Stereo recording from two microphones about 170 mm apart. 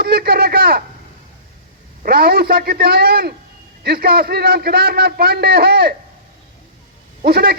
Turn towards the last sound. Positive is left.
turn(degrees=-65)  # may be behind; listen again after turning